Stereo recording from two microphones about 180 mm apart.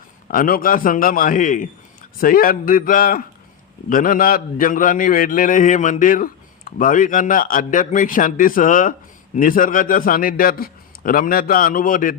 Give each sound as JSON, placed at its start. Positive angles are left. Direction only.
{"t": 0.3, "sound": "a man's voice", "side_deg": 50}